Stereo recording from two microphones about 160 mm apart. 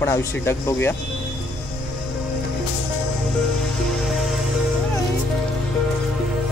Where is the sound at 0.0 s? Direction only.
15° left (ahead or behind).